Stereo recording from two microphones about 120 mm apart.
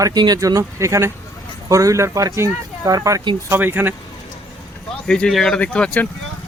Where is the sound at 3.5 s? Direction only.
15° right (ahead or behind).